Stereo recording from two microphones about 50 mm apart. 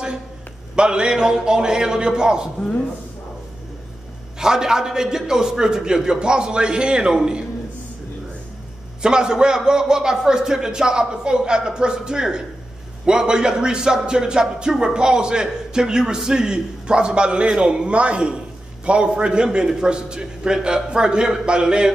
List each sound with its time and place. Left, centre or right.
0.7 s a man's voice: centre
4.4 s a man's voice: centre
9.0 s a man's voice: centre